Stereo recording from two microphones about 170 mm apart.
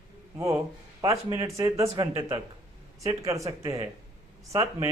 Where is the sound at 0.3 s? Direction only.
20° right (ahead or behind).